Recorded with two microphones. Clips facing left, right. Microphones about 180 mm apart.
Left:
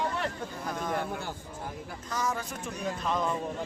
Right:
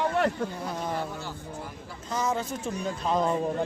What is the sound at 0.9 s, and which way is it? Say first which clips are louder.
Speech: even; 55° left (ahead or behind).